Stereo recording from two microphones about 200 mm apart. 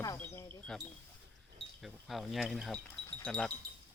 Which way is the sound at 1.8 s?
Centre (ahead or behind).